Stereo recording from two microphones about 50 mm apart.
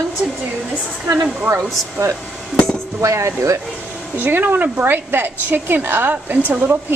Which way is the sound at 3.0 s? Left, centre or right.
Right.